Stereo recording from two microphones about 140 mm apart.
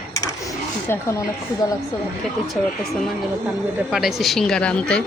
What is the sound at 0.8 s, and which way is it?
Speech, 15° left (ahead or behind).